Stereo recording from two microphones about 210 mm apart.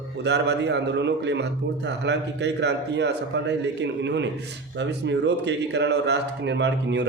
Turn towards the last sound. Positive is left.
turn(degrees=-55)  # may be behind; listen again after turning